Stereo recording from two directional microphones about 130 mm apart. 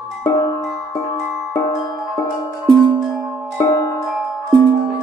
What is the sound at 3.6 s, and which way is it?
Music, 20° left (ahead or behind).